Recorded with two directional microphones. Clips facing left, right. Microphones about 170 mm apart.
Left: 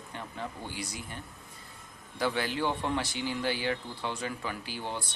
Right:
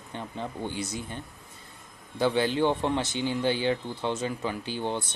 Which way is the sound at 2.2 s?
25° right (ahead or behind).